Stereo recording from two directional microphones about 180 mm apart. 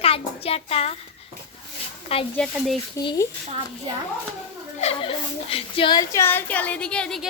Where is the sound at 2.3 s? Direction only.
5° left (ahead or behind).